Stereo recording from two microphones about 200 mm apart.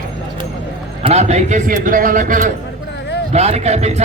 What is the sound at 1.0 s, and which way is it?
A man's voice, 35° right (ahead or behind).